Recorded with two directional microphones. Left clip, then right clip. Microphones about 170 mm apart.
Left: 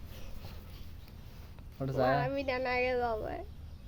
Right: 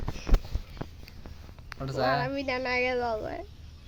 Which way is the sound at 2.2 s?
50° right (ahead or behind).